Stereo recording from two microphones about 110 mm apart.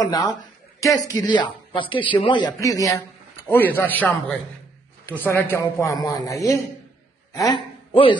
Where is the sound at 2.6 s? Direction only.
30° left (ahead or behind).